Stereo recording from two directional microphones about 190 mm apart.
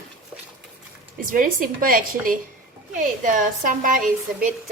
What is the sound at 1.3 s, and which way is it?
Speech, 45° right (ahead or behind).